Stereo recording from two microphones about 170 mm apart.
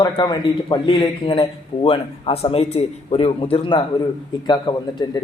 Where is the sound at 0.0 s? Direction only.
25° left (ahead or behind).